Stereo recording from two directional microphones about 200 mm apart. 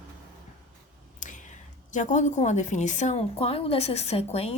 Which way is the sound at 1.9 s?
40° left (ahead or behind).